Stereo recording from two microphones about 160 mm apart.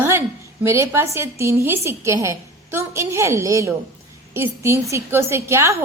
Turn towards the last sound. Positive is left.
turn(degrees=-15)  # may be behind; listen again after turning